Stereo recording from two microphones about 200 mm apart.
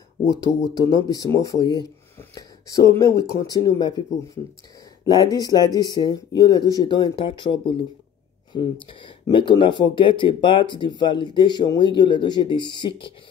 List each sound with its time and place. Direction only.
0.3 s speech: 20° right (ahead or behind)
0.9 s speech: 20° left (ahead or behind)
5.2 s speech: 20° left (ahead or behind)